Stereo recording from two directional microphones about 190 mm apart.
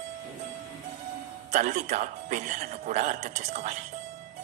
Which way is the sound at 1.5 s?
40° right (ahead or behind).